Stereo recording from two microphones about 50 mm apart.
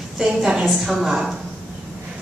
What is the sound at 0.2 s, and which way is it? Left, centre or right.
Speech, centre.